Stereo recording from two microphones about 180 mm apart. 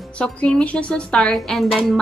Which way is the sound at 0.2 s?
5° left (ahead or behind).